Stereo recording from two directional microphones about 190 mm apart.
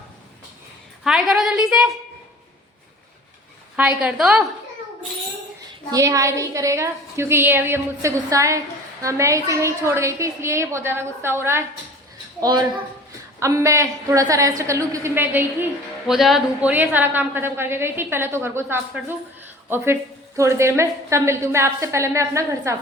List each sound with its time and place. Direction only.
1.0 s a woman's voice: 5° right (ahead or behind)
3.8 s a woman's voice: 5° right (ahead or behind)
5.9 s a woman's voice: 15° right (ahead or behind)